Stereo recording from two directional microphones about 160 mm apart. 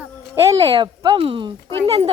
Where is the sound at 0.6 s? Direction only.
30° right (ahead or behind).